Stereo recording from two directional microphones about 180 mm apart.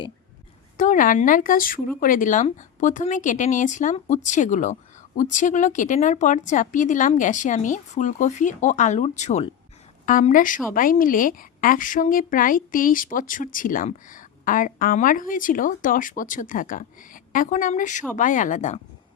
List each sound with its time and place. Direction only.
0.8 s speech: 45° left (ahead or behind)